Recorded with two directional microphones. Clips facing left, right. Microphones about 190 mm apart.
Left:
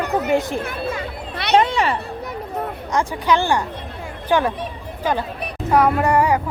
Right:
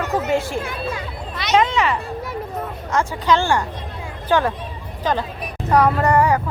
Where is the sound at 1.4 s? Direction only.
60° left (ahead or behind).